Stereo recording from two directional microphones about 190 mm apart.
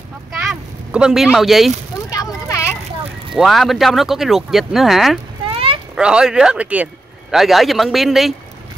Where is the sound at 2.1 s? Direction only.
15° left (ahead or behind).